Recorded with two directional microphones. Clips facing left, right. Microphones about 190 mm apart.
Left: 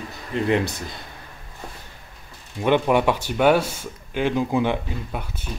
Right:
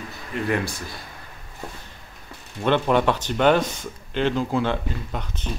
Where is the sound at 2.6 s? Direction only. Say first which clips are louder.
Left 1 dB; 10° left (ahead or behind).